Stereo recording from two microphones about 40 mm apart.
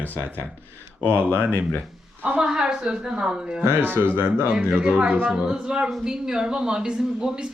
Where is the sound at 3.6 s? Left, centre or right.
Right.